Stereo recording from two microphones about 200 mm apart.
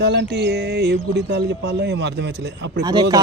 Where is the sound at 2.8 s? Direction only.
20° right (ahead or behind).